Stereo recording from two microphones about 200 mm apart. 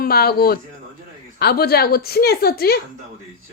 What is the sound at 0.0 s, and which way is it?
A woman's voice, 50° left (ahead or behind).